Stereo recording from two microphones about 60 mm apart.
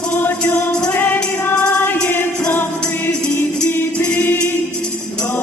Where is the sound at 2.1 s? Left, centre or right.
Left.